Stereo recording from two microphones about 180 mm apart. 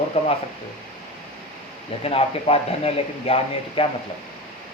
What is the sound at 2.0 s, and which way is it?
Speech, 35° left (ahead or behind).